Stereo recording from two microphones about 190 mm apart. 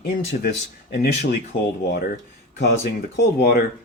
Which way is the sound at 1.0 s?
50° left (ahead or behind).